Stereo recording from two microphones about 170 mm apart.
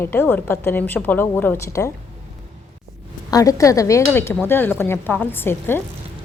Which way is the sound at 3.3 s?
20° left (ahead or behind).